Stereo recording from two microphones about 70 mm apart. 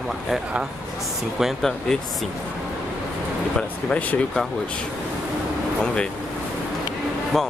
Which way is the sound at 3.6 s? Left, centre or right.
Centre.